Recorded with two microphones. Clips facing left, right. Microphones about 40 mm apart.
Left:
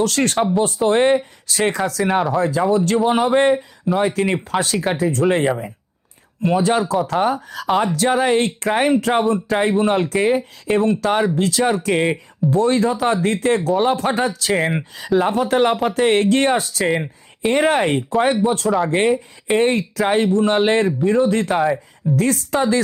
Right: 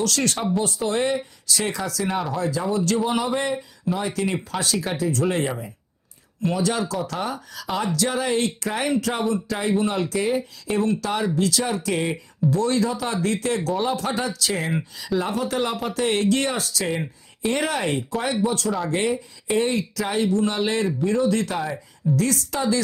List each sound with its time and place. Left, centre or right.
0.0 s speech: left
6.4 s speech: left
11.9 s speech: left
12.5 s speech: left
16.8 s speech: centre
17.5 s speech: left